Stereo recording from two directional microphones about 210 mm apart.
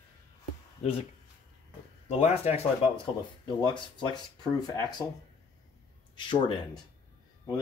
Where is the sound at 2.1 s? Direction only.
30° left (ahead or behind).